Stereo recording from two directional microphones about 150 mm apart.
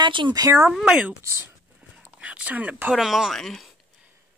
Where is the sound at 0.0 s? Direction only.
30° right (ahead or behind).